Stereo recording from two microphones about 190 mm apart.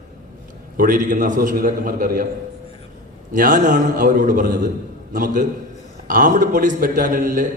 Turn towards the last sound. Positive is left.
turn(degrees=-45)  # may be behind; listen again after turning